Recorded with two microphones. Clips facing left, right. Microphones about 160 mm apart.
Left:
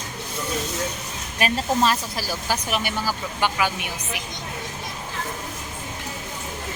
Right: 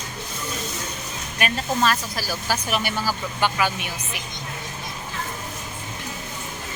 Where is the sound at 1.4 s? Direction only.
30° left (ahead or behind).